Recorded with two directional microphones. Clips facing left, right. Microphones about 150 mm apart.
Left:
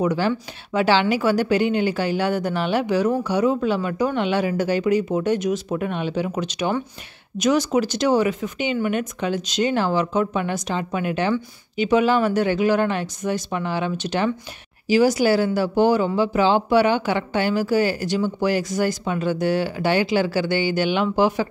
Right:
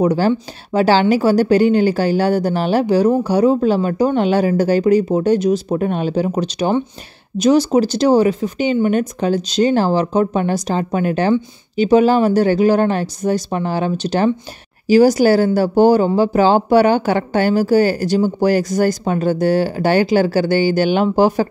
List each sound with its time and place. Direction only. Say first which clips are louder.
0.0 s speech: right 6 dB; 35° right (ahead or behind)